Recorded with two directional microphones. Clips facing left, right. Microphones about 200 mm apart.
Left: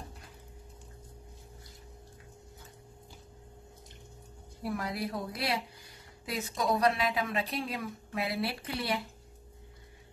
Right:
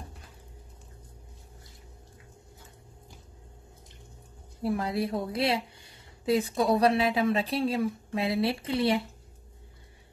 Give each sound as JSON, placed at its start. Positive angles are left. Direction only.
{"t": 4.6, "sound": "a woman's voice", "side_deg": -25}